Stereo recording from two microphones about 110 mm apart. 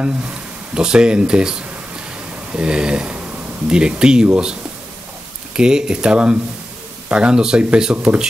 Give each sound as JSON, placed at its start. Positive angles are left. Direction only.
{"t": 0.0, "sound": "speech", "side_deg": -10}
{"t": 5.6, "sound": "speech", "side_deg": -10}